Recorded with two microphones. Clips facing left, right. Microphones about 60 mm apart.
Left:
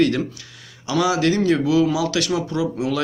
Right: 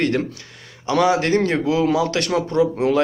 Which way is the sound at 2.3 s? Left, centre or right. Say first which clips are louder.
Right 4 dB; right.